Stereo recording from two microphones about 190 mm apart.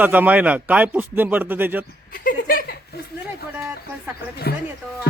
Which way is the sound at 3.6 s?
5° right (ahead or behind).